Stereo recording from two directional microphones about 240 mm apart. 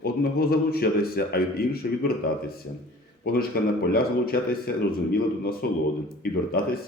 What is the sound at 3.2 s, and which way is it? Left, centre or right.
A man's voice, left.